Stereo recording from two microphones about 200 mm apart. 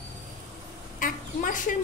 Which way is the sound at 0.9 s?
40° left (ahead or behind).